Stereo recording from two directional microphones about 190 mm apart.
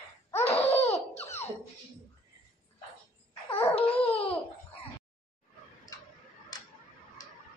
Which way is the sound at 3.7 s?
30° left (ahead or behind).